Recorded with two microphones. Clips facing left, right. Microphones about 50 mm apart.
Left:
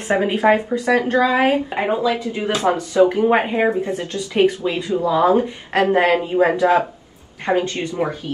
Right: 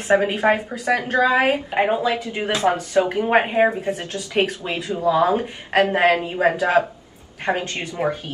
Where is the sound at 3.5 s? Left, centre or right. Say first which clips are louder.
Even; centre.